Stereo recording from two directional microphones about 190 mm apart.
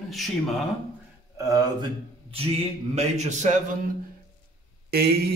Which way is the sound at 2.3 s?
30° right (ahead or behind).